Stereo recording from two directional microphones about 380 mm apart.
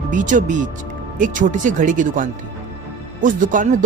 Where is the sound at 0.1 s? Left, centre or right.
Centre.